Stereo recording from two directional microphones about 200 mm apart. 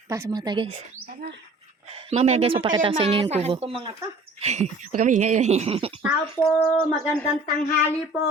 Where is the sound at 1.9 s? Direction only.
30° right (ahead or behind).